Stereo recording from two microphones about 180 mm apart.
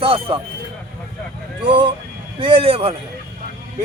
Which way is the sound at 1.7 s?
30° right (ahead or behind).